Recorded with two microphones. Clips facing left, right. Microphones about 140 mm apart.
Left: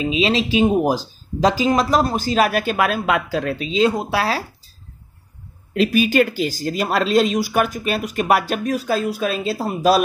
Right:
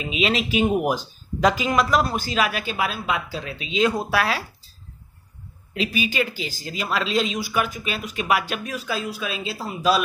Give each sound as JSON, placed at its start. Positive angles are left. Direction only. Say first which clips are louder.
{"t": 0.0, "sound": "speech", "louder": "left 5 dB", "side_deg": 30}
{"t": 3.6, "sound": "speech", "louder": "left 1 dB", "side_deg": 30}
{"t": 5.8, "sound": "speech", "louder": "left 8 dB", "side_deg": 50}